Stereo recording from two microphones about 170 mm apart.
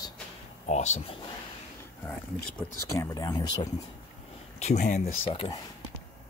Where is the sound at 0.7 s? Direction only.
40° left (ahead or behind).